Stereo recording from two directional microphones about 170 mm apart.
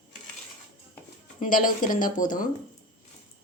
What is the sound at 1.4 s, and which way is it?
A woman's voice, 50° left (ahead or behind).